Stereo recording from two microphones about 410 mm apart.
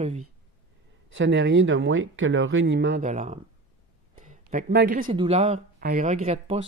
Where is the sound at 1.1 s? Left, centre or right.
Right.